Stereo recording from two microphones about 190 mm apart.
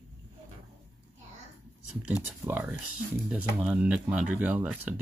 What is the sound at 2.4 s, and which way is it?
Speech, 10° right (ahead or behind).